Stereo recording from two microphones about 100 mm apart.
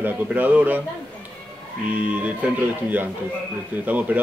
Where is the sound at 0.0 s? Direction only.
15° right (ahead or behind).